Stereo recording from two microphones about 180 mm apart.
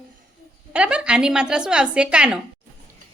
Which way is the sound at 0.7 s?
5° right (ahead or behind).